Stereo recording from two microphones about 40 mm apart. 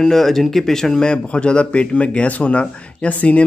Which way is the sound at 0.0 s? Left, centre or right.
Centre.